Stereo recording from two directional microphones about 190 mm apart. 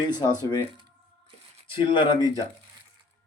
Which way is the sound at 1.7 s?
25° left (ahead or behind).